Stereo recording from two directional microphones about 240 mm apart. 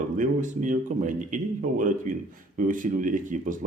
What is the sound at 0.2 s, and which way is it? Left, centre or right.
Speech, right.